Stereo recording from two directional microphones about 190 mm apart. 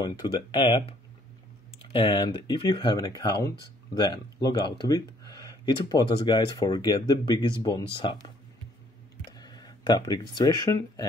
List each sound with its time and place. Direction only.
0.0 s speech: 20° left (ahead or behind)
9.4 s speech: 20° left (ahead or behind)